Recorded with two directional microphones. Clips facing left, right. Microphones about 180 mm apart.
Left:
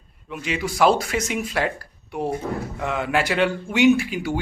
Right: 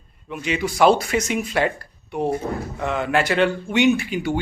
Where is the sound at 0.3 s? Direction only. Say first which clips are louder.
Right 2 dB; centre (ahead or behind).